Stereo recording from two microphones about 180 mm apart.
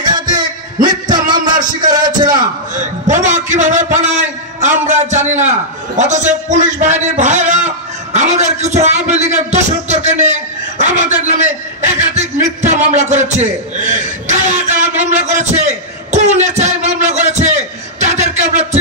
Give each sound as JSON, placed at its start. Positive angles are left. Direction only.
{"t": 0.0, "sound": "a sound", "side_deg": -25}
{"t": 2.7, "sound": "a man's voice", "side_deg": -45}
{"t": 18.5, "sound": "music", "side_deg": -40}